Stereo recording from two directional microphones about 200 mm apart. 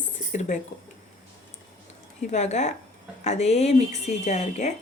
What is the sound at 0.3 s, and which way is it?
Speech, 40° left (ahead or behind).